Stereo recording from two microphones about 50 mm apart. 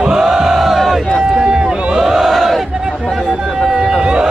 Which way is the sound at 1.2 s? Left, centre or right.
Centre.